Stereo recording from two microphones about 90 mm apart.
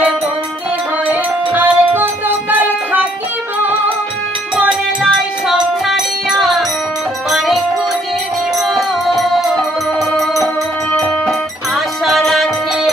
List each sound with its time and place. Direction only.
1.0 s music: 20° right (ahead or behind)
7.2 s music: 5° right (ahead or behind)
8.7 s music: centre (ahead or behind)